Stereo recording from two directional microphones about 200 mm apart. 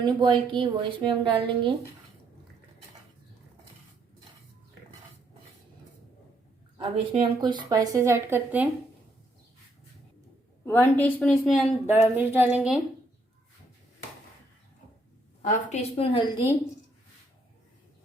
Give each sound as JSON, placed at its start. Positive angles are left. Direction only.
{"t": 0.0, "sound": "a woman's voice", "side_deg": -25}
{"t": 6.7, "sound": "a woman's voice", "side_deg": -25}
{"t": 10.7, "sound": "a woman's voice", "side_deg": 10}
{"t": 15.4, "sound": "a woman's voice", "side_deg": 35}